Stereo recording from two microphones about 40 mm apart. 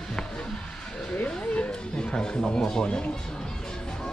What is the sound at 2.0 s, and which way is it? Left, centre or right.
Speech, left.